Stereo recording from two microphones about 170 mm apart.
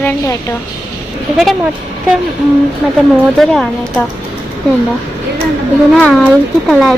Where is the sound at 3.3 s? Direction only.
Centre (ahead or behind).